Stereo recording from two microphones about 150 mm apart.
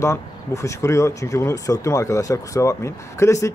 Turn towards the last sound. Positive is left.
turn(degrees=20)  # may be behind; listen again after turning